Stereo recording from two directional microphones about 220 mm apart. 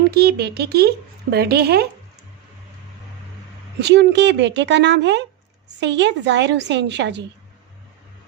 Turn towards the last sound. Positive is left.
turn(degrees=-50)  # may be behind; listen again after turning